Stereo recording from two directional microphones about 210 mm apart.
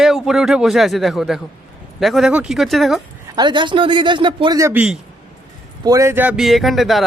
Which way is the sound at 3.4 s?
20° right (ahead or behind).